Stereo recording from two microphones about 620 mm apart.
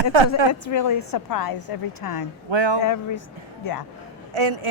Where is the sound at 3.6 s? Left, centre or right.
Left.